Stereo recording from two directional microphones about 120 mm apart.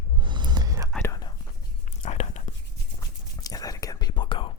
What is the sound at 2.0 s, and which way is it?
Whispering, 65° left (ahead or behind).